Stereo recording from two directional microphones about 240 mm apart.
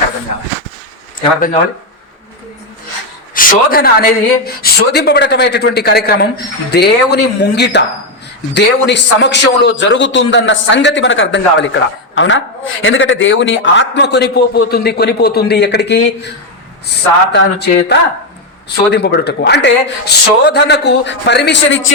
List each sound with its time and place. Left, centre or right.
3.3 s a man's voice: left
17.3 s a man's voice: left